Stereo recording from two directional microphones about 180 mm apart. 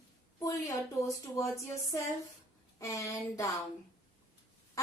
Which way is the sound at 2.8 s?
15° left (ahead or behind).